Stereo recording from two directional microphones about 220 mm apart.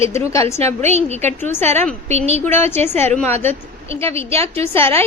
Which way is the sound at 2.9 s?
30° right (ahead or behind).